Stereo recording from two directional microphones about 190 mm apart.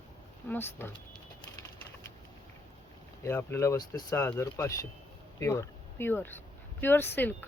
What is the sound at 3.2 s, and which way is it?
Speech, 15° left (ahead or behind).